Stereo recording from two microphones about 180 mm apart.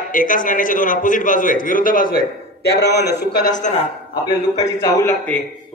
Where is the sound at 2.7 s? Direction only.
70° left (ahead or behind).